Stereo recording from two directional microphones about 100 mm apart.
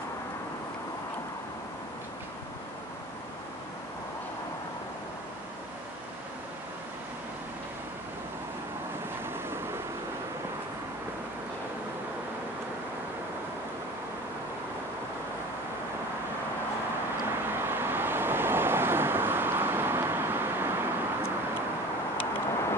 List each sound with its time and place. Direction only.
17.5 s vehicle: 20° right (ahead or behind)
22.1 s vehicle: 15° left (ahead or behind)